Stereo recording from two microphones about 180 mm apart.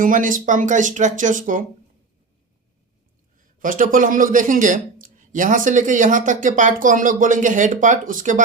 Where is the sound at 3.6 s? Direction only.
50° right (ahead or behind).